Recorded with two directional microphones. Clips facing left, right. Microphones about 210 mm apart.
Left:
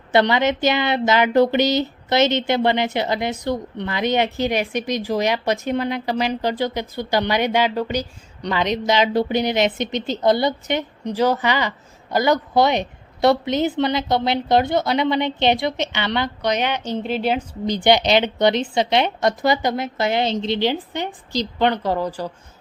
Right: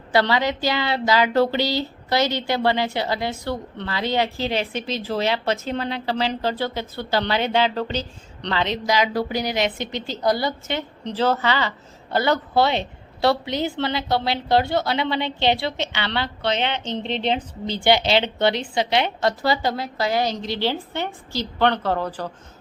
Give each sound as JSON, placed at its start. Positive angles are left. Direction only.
{"t": 0.1, "sound": "speech", "side_deg": 20}